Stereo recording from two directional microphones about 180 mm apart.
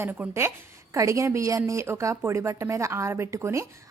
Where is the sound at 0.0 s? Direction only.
10° right (ahead or behind).